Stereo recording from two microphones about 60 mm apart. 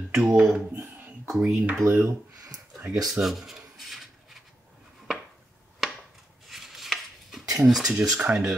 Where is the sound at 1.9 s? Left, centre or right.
Right.